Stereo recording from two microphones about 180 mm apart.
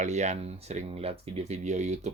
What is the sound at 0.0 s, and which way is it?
Speech, 40° right (ahead or behind).